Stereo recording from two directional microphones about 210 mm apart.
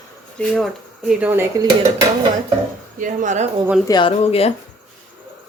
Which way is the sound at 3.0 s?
35° right (ahead or behind).